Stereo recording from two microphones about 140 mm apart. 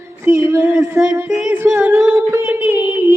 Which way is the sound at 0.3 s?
20° right (ahead or behind).